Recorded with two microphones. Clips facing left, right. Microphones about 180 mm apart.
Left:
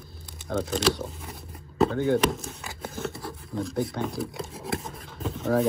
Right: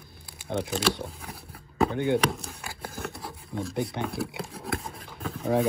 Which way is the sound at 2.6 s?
Centre (ahead or behind).